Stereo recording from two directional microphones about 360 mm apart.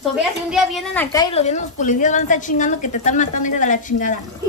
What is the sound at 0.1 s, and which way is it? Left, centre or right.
A woman's voice, centre.